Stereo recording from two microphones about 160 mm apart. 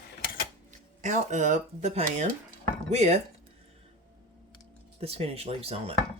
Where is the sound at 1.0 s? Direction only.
50° right (ahead or behind).